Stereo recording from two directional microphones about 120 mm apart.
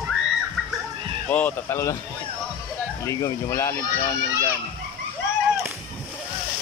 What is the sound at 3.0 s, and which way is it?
Speech, 30° left (ahead or behind).